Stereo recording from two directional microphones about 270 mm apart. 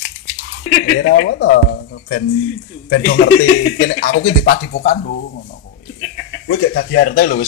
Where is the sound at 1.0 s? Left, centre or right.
Left.